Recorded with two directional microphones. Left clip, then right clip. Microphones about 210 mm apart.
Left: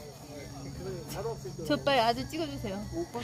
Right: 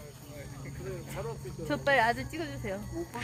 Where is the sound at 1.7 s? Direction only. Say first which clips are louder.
Even; 65° left (ahead or behind).